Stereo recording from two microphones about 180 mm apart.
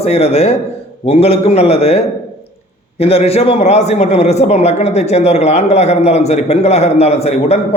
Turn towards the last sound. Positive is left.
turn(degrees=35)  # may be behind; listen again after turning